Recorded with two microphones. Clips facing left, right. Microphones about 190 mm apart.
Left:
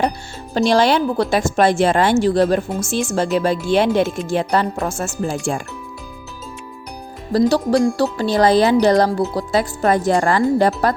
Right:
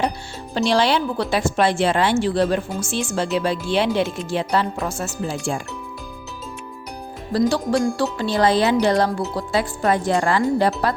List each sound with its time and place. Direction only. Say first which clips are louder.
0.5 s a woman's voice: left 4 dB; 45° left (ahead or behind)
7.3 s speech: left 4 dB; 40° left (ahead or behind)